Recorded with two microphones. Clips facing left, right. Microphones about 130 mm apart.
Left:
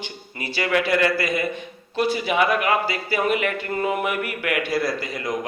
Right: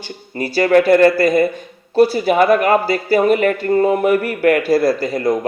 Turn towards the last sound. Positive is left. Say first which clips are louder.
# right 10 dB
turn(degrees=-35)  # may be behind; listen again after turning